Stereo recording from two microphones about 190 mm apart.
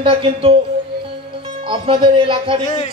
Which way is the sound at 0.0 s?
30° right (ahead or behind).